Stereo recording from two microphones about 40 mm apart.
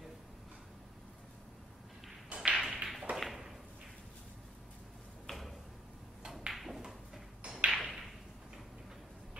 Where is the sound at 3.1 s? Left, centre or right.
Centre.